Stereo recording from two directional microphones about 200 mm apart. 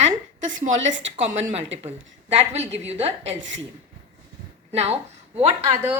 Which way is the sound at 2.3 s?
35° right (ahead or behind).